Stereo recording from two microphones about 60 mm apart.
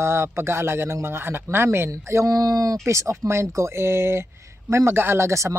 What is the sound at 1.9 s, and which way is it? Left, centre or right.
Speech, right.